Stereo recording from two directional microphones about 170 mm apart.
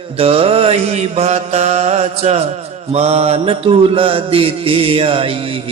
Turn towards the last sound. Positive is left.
turn(degrees=-35)  # may be behind; listen again after turning